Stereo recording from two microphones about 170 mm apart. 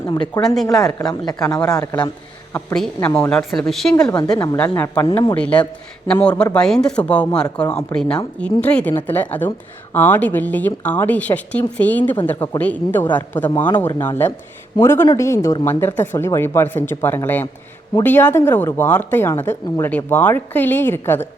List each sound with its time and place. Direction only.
0.4 s a woman's voice: 5° left (ahead or behind)
0.9 s a woman's voice: 25° left (ahead or behind)
2.7 s a woman's voice: 5° left (ahead or behind)
3.1 s speech: 15° left (ahead or behind)
3.3 s a woman's voice: 5° left (ahead or behind)